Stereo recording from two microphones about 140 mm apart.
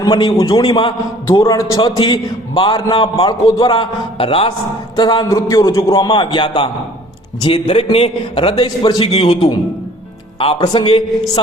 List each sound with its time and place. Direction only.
0.0 s a man's voice: 30° left (ahead or behind)
1.3 s a man's voice: 25° left (ahead or behind)
7.9 s a man's voice: 40° left (ahead or behind)